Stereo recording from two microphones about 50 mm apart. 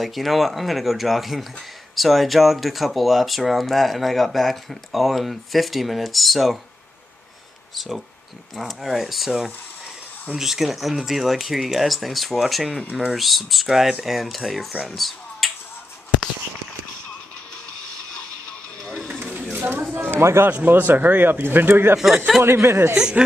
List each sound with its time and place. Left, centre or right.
0.0 s speech: centre
7.7 s speech: centre
10.3 s speech: centre
14.9 s a sound: centre
19.7 s a sound: right
20.6 s speech: right
21.9 s speech: centre
22.4 s speech: right
22.9 s speech: centre